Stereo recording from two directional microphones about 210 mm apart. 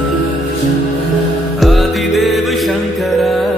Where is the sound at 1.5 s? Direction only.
Centre (ahead or behind).